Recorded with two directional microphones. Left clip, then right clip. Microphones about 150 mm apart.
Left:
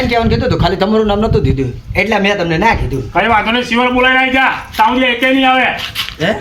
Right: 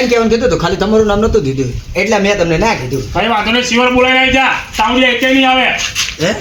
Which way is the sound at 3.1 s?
20° right (ahead or behind).